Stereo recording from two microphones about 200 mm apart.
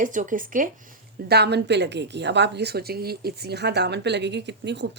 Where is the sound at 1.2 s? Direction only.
55° right (ahead or behind).